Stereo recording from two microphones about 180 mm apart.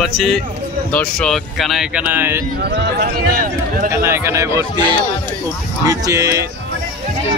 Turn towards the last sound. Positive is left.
turn(degrees=-15)  # may be behind; listen again after turning